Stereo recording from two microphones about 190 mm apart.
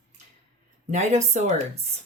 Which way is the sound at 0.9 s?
35° right (ahead or behind).